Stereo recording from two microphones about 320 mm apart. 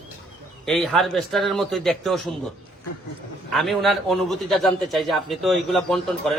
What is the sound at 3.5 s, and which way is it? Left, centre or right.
A man's voice, centre.